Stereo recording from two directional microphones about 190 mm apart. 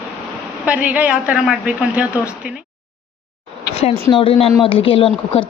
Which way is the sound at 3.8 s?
30° left (ahead or behind).